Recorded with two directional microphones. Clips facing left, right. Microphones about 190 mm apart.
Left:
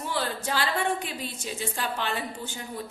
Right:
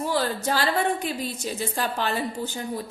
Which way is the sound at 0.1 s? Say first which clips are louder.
Right 3 dB; 40° right (ahead or behind).